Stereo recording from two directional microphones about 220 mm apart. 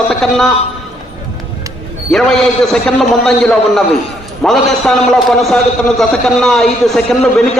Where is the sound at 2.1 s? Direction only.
Centre (ahead or behind).